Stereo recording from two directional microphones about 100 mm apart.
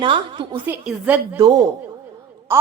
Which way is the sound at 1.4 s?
40° right (ahead or behind).